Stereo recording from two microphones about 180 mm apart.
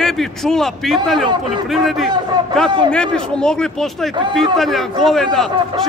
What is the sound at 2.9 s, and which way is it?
A man's voice, 5° left (ahead or behind).